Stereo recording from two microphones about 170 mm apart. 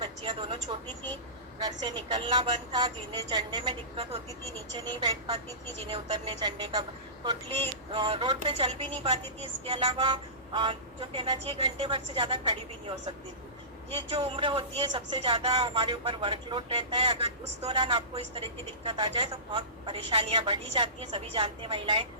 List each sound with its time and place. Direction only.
0.0 s a sound: 30° right (ahead or behind)
1.5 s a woman's voice: 25° right (ahead or behind)
7.9 s a woman's voice: 30° right (ahead or behind)
13.9 s speech: 35° right (ahead or behind)